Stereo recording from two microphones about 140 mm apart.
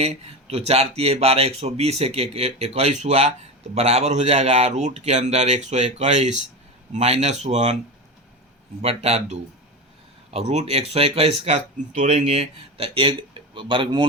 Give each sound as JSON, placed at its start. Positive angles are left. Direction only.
{"t": 0.0, "sound": "a man's voice", "side_deg": -45}
{"t": 8.8, "sound": "speech", "side_deg": -50}